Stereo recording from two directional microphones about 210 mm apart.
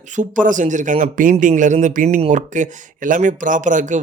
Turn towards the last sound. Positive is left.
turn(degrees=-35)  # may be behind; listen again after turning